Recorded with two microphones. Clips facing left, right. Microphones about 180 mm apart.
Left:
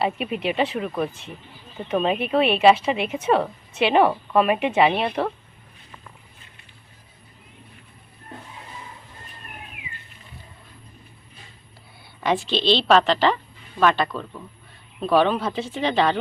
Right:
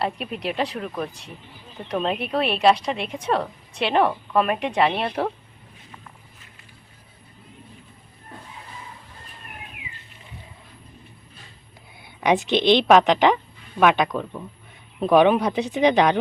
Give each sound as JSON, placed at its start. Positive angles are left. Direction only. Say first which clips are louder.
{"t": 0.0, "sound": "a woman's voice", "louder": "left 3 dB", "side_deg": 5}
{"t": 12.2, "sound": "a woman's voice", "louder": "right 3 dB", "side_deg": -20}